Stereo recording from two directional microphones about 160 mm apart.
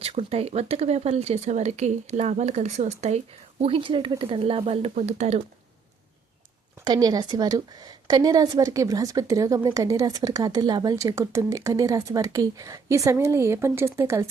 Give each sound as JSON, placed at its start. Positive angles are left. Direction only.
{"t": 0.0, "sound": "speech", "side_deg": -40}
{"t": 3.6, "sound": "speech", "side_deg": -35}
{"t": 6.8, "sound": "a woman's voice", "side_deg": -25}